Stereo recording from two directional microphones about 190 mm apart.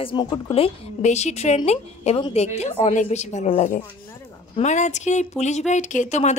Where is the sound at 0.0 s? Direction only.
25° left (ahead or behind).